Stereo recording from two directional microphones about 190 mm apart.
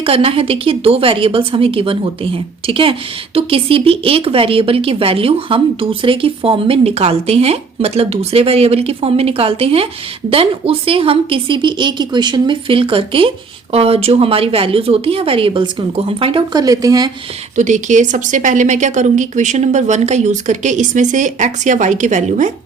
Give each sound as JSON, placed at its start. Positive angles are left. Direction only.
{"t": 0.0, "sound": "speech", "side_deg": -30}
{"t": 17.6, "sound": "speech", "side_deg": -40}